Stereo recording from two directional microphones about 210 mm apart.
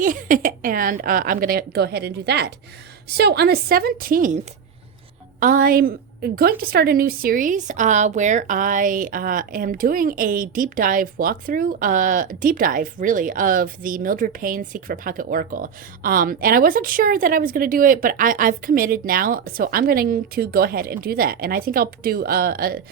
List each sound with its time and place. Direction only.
0.0 s a woman's voice: 40° right (ahead or behind)
5.4 s a woman's voice: 40° right (ahead or behind)